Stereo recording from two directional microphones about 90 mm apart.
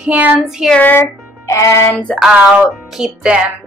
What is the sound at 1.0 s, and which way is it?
Music, 35° left (ahead or behind).